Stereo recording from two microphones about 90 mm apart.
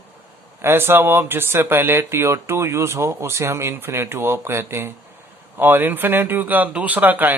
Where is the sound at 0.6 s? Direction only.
25° right (ahead or behind).